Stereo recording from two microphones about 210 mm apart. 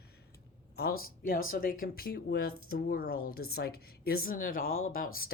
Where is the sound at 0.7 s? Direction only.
45° left (ahead or behind).